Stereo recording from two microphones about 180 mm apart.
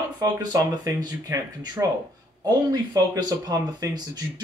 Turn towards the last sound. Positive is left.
turn(degrees=-20)  # may be behind; listen again after turning